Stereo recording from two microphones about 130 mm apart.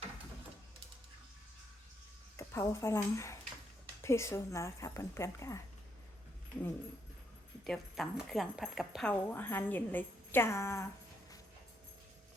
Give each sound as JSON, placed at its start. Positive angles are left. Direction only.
{"t": 2.3, "sound": "a woman's voice", "side_deg": 20}
{"t": 7.6, "sound": "speech", "side_deg": 0}
{"t": 9.2, "sound": "a woman's voice", "side_deg": 15}